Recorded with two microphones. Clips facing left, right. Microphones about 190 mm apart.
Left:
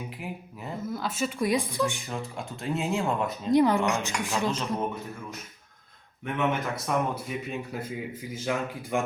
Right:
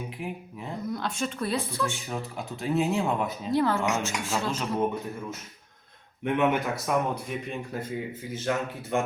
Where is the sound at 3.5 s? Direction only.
15° left (ahead or behind).